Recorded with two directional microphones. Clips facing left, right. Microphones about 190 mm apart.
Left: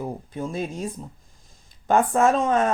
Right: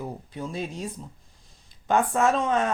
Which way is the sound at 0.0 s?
45° left (ahead or behind).